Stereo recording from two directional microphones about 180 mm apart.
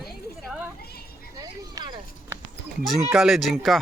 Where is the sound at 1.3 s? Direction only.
25° right (ahead or behind).